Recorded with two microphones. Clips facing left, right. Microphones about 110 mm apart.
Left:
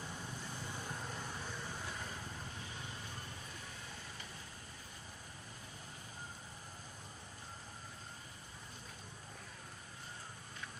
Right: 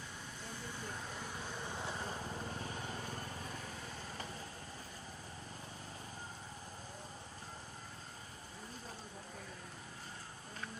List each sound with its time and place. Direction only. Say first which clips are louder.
1.8 s vehicle: right 4 dB; 30° right (ahead or behind)
2.6 s vehicle: right 5 dB; 40° right (ahead or behind)